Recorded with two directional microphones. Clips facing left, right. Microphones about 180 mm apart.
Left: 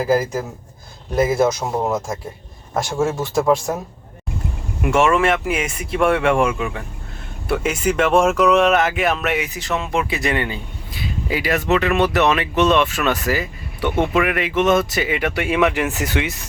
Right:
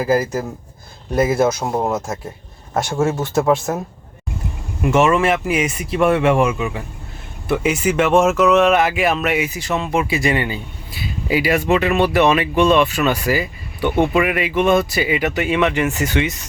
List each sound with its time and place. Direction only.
0.0 s speech: 10° right (ahead or behind)
1.6 s speech: 15° right (ahead or behind)
1.9 s speech: centre (ahead or behind)
4.8 s speech: 5° right (ahead or behind)
11.9 s speech: centre (ahead or behind)